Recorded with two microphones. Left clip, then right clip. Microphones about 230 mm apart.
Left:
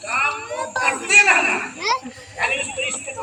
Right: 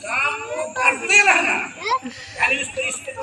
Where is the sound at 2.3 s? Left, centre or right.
Centre.